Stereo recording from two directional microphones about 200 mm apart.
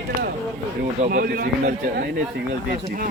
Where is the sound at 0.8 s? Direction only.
45° right (ahead or behind).